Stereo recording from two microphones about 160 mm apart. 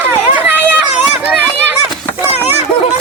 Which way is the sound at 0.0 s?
10° right (ahead or behind).